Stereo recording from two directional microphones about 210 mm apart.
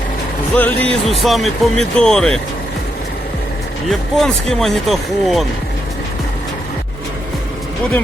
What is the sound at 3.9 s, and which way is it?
Speech, centre (ahead or behind).